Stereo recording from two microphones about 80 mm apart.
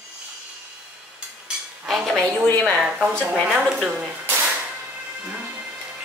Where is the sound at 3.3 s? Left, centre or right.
Centre.